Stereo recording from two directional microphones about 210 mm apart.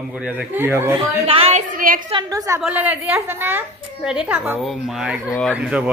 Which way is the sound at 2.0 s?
20° right (ahead or behind).